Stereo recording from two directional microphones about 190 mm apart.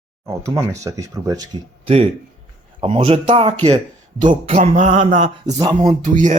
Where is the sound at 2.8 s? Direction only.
30° right (ahead or behind).